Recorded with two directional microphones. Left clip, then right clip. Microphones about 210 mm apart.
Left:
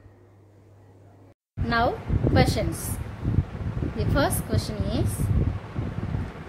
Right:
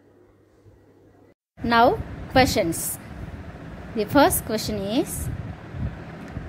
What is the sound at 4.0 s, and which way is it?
A woman's voice, 30° right (ahead or behind).